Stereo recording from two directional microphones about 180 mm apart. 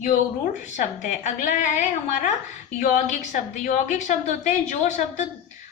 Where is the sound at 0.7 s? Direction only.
45° left (ahead or behind).